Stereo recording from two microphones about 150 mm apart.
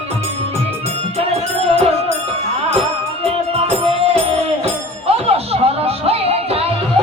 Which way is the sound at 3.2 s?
40° right (ahead or behind).